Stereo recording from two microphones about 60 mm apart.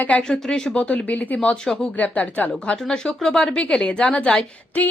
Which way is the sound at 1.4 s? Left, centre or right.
Centre.